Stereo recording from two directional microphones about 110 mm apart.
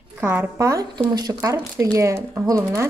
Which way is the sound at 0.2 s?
20° right (ahead or behind).